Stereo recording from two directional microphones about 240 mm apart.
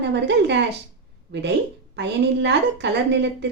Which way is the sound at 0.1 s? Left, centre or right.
Right.